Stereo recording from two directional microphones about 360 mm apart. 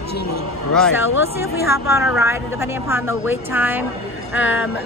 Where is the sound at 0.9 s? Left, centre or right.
Left.